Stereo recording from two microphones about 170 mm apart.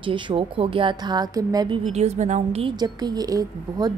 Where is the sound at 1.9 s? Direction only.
40° right (ahead or behind).